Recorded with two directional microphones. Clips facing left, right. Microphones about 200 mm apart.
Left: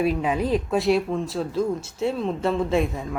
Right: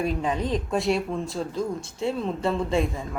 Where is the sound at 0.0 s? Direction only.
5° left (ahead or behind).